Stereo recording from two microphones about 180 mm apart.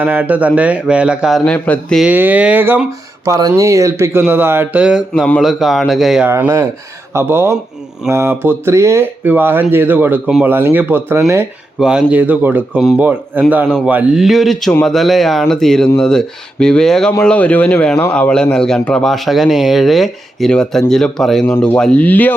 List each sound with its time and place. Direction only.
0.0 s a man's voice: 10° right (ahead or behind)
2.0 s speech: 10° right (ahead or behind)
6.2 s a man's voice: 15° right (ahead or behind); by 22.4 s 10° left (ahead or behind)